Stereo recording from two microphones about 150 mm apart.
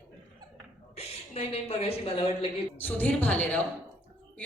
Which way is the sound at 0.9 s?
40° left (ahead or behind).